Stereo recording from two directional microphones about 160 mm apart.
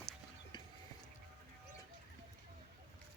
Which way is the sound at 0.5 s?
30° left (ahead or behind).